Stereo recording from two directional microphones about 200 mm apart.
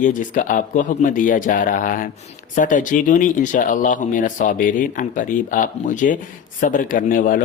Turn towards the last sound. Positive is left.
turn(degrees=40)  # may be behind; listen again after turning